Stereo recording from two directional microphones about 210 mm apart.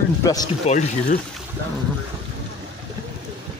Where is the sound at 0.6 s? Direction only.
35° left (ahead or behind).